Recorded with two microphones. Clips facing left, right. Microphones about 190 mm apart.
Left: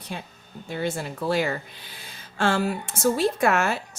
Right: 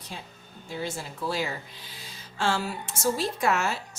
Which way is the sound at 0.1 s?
60° left (ahead or behind).